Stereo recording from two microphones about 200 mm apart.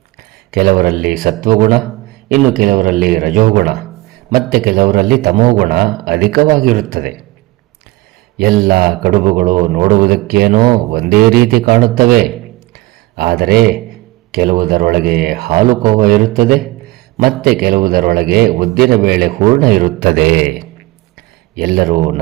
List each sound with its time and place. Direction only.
0.5 s a man's voice: 50° right (ahead or behind)
8.4 s a man's voice: 45° right (ahead or behind)
12.7 s a sound: 50° right (ahead or behind)
14.6 s a man's voice: 45° right (ahead or behind)